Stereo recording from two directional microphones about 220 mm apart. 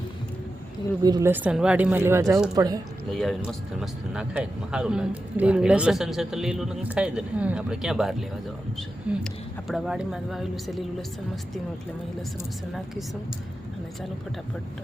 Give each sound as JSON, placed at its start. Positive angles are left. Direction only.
{"t": 1.0, "sound": "speech", "side_deg": -15}
{"t": 3.1, "sound": "speech", "side_deg": 0}